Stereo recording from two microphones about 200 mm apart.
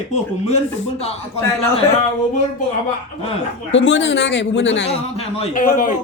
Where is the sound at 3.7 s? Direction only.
70° left (ahead or behind).